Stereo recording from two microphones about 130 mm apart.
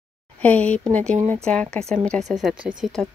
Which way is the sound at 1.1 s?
65° right (ahead or behind).